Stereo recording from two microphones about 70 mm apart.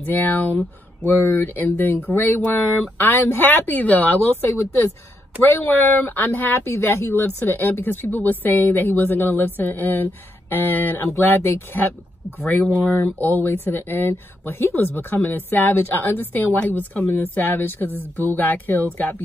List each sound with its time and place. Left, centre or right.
0.0 s speech: left
5.4 s speech: left